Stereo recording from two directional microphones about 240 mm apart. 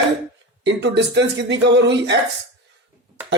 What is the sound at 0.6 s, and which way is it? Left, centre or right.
Speech, right.